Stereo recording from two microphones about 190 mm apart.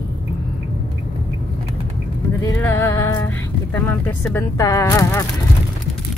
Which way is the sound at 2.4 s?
15° left (ahead or behind).